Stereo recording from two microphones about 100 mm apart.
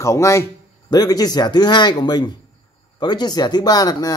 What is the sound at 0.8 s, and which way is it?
Speech, 40° left (ahead or behind).